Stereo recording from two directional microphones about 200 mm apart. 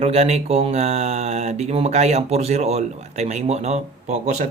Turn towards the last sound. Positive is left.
turn(degrees=-35)  # may be behind; listen again after turning